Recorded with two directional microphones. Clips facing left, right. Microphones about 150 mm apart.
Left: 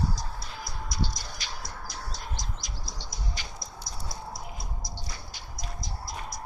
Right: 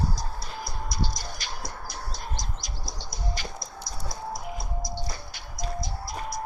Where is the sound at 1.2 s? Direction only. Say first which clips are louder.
Right 3 dB; 50° right (ahead or behind).